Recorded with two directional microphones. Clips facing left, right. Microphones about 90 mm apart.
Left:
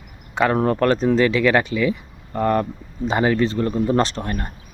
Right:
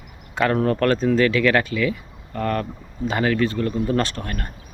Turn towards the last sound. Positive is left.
turn(degrees=25)  # may be behind; listen again after turning